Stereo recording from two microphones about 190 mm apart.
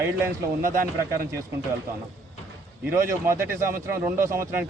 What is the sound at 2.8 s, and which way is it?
A man's voice, 15° right (ahead or behind).